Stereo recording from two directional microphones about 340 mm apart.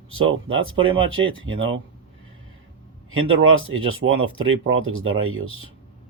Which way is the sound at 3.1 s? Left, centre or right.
Right.